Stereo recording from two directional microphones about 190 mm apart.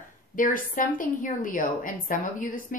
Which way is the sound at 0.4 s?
45° left (ahead or behind).